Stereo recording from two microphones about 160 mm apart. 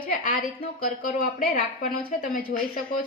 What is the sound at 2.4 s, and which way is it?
Speech, 60° left (ahead or behind).